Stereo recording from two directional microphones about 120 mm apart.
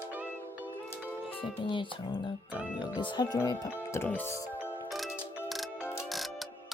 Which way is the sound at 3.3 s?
25° left (ahead or behind).